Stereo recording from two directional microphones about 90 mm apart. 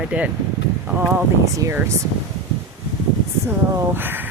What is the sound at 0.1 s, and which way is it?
Speech, 15° right (ahead or behind).